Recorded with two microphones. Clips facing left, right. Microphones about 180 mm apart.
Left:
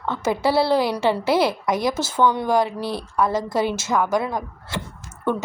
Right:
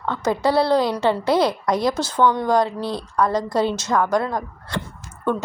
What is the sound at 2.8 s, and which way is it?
Speech, 20° right (ahead or behind).